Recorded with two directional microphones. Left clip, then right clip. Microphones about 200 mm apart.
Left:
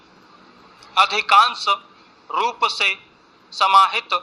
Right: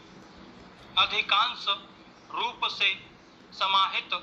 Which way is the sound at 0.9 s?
50° left (ahead or behind).